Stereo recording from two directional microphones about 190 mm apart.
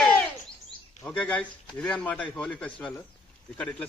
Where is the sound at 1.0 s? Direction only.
5° left (ahead or behind).